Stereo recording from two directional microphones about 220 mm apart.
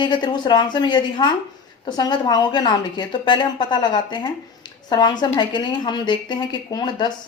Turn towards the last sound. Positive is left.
turn(degrees=20)  # may be behind; listen again after turning